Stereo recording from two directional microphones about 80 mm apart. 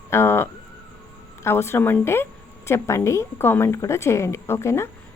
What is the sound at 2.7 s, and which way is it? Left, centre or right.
A woman's voice, left.